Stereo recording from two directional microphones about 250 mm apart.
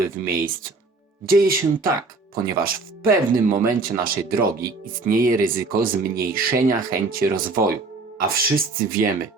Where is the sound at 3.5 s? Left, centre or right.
Right.